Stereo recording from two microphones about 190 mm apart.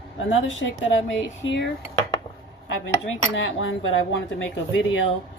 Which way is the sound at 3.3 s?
90° left.